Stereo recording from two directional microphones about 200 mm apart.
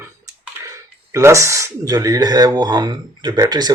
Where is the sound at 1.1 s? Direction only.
15° right (ahead or behind).